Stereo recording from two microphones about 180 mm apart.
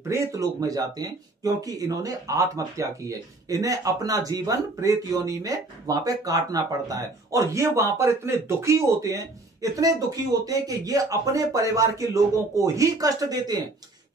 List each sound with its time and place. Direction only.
0.1 s speech: 20° right (ahead or behind)